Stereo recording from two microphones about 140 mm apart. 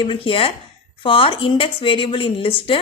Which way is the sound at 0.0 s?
40° left (ahead or behind).